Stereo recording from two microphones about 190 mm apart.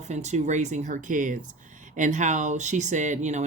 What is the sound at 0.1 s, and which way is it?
Speech, 40° right (ahead or behind).